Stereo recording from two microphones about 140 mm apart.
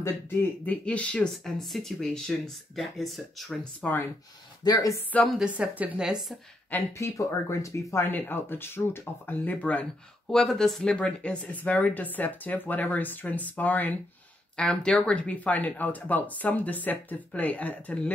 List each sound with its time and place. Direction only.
0.0 s speech: 15° left (ahead or behind)
3.8 s speech: 15° left (ahead or behind)
4.6 s speech: 30° left (ahead or behind)
5.1 s speech: 5° left (ahead or behind)
5.4 s speech: 10° right (ahead or behind)
6.7 s speech: 20° left (ahead or behind)